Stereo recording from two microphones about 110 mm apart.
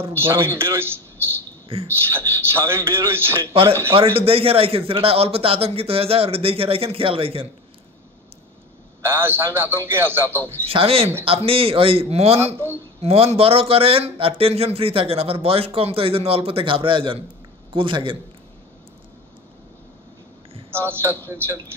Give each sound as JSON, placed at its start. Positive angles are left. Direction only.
{"t": 0.2, "sound": "speech", "side_deg": -20}
{"t": 1.7, "sound": "a man's voice", "side_deg": -60}
{"t": 2.0, "sound": "speech", "side_deg": -20}
{"t": 3.9, "sound": "a man's voice", "side_deg": -60}
{"t": 9.0, "sound": "speech", "side_deg": -20}
{"t": 10.7, "sound": "a man's voice", "side_deg": -60}
{"t": 20.7, "sound": "speech", "side_deg": -20}